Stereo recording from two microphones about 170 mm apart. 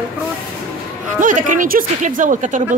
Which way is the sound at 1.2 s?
50° right (ahead or behind).